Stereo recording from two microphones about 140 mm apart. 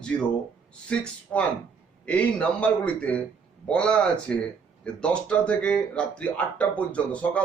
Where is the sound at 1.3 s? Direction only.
15° left (ahead or behind).